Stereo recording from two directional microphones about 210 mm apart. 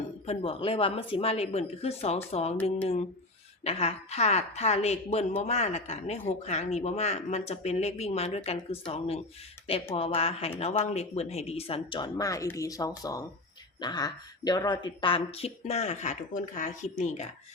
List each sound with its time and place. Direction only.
0.3 s speech: 25° left (ahead or behind)
3.6 s a woman's voice: 30° left (ahead or behind)